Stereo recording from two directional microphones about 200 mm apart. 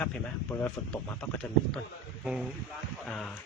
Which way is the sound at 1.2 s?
5° left (ahead or behind).